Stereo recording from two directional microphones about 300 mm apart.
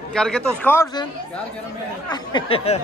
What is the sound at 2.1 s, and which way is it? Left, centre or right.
Speech, centre.